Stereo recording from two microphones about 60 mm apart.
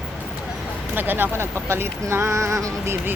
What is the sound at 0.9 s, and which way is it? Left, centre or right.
Speech, right.